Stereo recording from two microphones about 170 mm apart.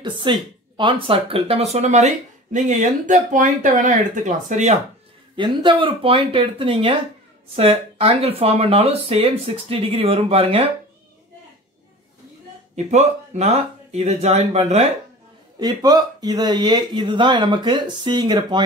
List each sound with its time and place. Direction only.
0.0 s speech: 30° right (ahead or behind); by 4.7 s 45° right (ahead or behind)
5.3 s speech: 30° right (ahead or behind)
12.7 s speech: 40° right (ahead or behind)
15.6 s speech: 25° right (ahead or behind)